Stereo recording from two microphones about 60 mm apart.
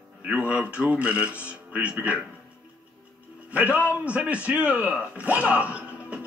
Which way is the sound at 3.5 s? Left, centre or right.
Right.